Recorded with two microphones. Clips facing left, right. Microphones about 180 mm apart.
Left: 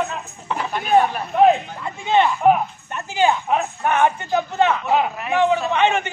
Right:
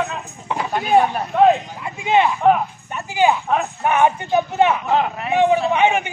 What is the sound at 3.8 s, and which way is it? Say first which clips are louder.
A man's voice: right 3 dB; 15° right (ahead or behind).